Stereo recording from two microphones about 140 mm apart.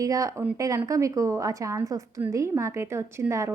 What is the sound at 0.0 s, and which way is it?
Speech, 25° right (ahead or behind).